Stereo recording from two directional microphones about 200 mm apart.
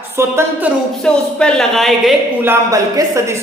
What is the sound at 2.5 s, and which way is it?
Speech, 15° right (ahead or behind).